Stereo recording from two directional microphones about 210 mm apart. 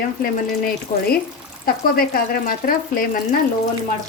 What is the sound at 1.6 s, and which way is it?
Speech, 45° left (ahead or behind).